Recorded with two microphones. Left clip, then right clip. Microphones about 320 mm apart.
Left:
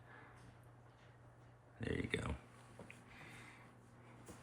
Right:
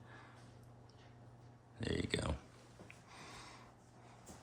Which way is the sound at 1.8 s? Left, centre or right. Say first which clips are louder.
Right 2 dB; centre.